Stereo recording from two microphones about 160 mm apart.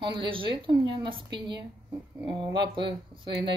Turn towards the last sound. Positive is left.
turn(degrees=-30)  # may be behind; listen again after turning